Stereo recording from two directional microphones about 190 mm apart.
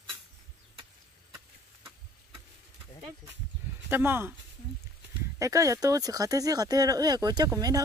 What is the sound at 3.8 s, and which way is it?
Speech, 10° right (ahead or behind).